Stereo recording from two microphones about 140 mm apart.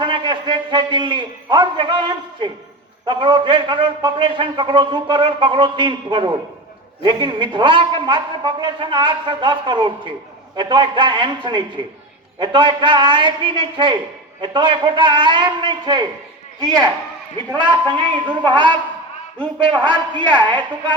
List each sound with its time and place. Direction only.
0.0 s a man's voice: 35° right (ahead or behind)
18.3 s a man's voice: 35° right (ahead or behind)